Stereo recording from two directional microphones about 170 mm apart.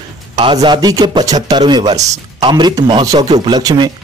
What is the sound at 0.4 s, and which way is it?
Speech, 30° right (ahead or behind).